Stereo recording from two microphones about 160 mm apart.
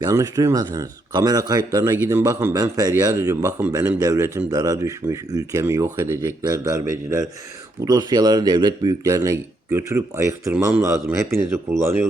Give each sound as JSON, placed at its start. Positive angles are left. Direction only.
{"t": 0.0, "sound": "speech", "side_deg": -20}
{"t": 7.9, "sound": "speech", "side_deg": -25}